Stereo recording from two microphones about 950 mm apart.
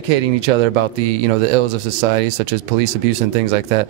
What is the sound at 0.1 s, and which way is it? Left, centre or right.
Speech, right.